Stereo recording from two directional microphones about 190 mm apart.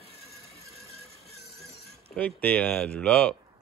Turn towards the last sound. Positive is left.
turn(degrees=5)  # may be behind; listen again after turning